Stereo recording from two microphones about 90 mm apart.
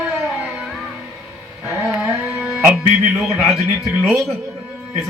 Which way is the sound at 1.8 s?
5° right (ahead or behind).